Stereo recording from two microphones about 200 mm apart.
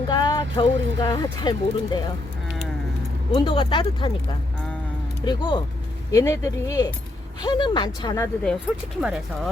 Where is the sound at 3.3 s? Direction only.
25° left (ahead or behind).